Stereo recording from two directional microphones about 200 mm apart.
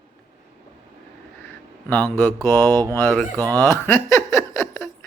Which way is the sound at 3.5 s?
10° left (ahead or behind).